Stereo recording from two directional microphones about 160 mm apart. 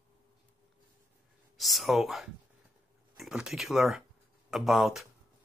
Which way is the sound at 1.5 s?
Centre (ahead or behind).